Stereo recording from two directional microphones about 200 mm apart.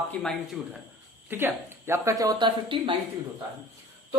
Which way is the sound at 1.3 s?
10° right (ahead or behind).